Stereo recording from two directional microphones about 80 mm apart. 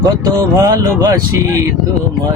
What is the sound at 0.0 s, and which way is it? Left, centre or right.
Speech, right.